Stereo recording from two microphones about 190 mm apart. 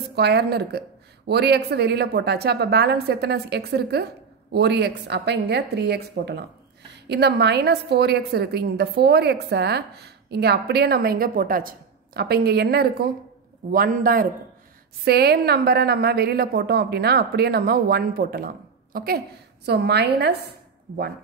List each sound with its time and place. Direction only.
0.1 s a woman's voice: 60° right (ahead or behind)